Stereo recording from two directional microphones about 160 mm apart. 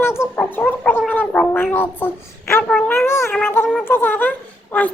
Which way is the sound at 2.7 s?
10° left (ahead or behind).